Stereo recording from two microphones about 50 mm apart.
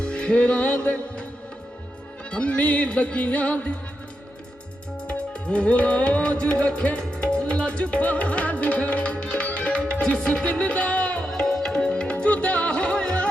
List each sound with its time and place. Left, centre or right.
0.0 s music: left
2.3 s music: left
5.0 s music: left
11.3 s music: centre